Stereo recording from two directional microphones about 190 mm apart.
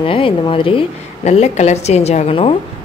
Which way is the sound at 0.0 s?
30° left (ahead or behind).